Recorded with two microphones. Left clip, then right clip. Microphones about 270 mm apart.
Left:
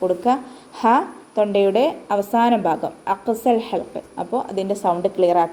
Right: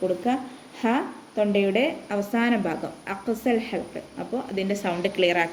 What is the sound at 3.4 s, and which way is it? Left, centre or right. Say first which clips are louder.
A woman's voice: left 5 dB; left.